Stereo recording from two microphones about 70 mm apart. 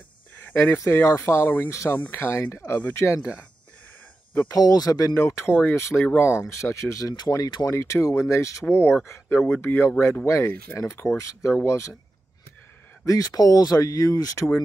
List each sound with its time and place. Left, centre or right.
0.6 s speech: left
4.5 s speech: left
5.1 s speech: left
5.5 s speech: left
5.8 s speech: left
7.7 s speech: left
13.0 s speech: left